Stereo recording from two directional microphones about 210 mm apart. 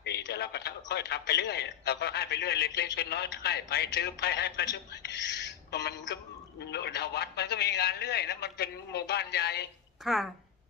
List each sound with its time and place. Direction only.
0.0 s a man's voice: 55° left (ahead or behind)
10.0 s a woman's voice: centre (ahead or behind)